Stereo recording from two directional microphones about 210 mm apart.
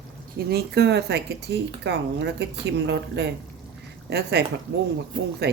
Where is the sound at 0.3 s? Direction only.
50° right (ahead or behind).